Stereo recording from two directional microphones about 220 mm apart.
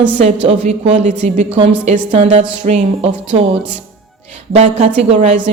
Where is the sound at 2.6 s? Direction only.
30° right (ahead or behind).